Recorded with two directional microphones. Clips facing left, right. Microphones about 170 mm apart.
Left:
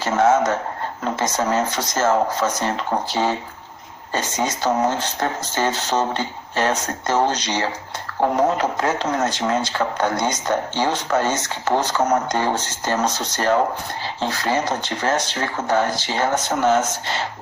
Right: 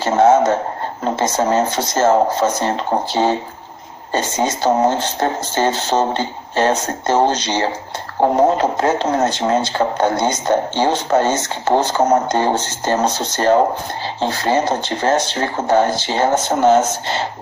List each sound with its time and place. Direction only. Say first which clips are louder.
0.0 s speech: right 5 dB; 30° right (ahead or behind)